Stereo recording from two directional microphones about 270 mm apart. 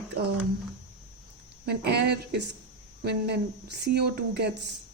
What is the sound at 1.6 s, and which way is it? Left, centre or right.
Speech, right.